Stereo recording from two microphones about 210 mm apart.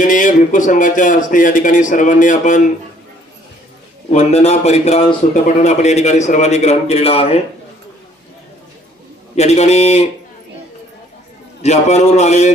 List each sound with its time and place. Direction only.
0.0 s a man's voice: 40° left (ahead or behind)
4.1 s a man's voice: 30° left (ahead or behind)
9.3 s a man's voice: 30° left (ahead or behind)
11.6 s a man's voice: 30° left (ahead or behind)